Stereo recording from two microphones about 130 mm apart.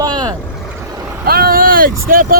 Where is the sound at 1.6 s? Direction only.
90° right.